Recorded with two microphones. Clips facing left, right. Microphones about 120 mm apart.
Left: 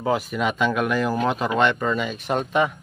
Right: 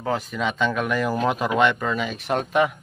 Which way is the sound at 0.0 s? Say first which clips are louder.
Left 2 dB; 10° left (ahead or behind).